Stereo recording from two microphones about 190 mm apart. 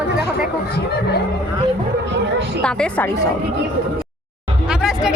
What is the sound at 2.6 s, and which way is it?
Speech, 5° left (ahead or behind).